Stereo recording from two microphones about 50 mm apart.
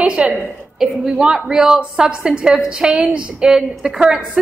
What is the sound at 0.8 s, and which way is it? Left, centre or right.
A woman's voice, centre.